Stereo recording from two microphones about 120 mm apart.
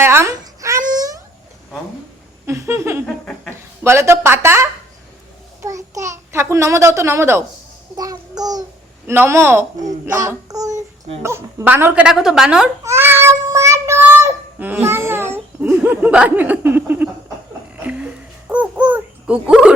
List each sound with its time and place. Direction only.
0.0 s babbling: 20° right (ahead or behind)
2.5 s speech: 20° right (ahead or behind)
5.6 s babbling: 25° right (ahead or behind)
7.9 s child singing: 35° right (ahead or behind)
9.0 s speech: 20° right (ahead or behind)
10.2 s child singing: 30° right (ahead or behind)
11.2 s a woman's voice: 20° right (ahead or behind); by 12.7 s 5° right (ahead or behind)
12.8 s child singing: 20° right (ahead or behind)
17.7 s babbling: 10° right (ahead or behind)